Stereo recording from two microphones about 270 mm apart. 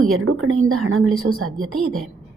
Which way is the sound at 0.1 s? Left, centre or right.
Right.